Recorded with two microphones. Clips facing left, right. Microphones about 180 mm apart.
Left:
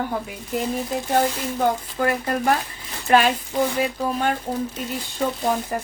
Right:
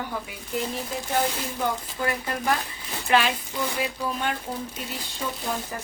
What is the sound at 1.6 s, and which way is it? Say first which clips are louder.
Speech: left 6 dB; 45° left (ahead or behind).